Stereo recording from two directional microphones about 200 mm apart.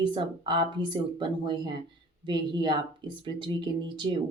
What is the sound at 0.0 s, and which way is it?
Speech, 25° right (ahead or behind).